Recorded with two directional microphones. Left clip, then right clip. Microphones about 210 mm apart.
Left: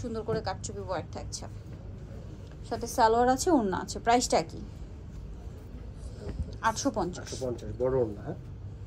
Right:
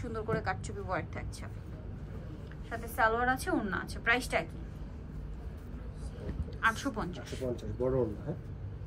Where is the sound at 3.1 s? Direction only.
20° left (ahead or behind).